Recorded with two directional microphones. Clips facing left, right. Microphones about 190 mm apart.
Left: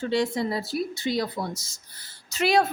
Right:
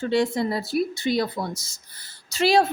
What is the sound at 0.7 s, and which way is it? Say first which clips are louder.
Speech: right 4 dB; 60° right (ahead or behind).